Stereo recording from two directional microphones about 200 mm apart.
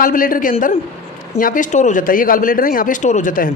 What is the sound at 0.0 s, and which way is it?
A woman's voice, 45° left (ahead or behind).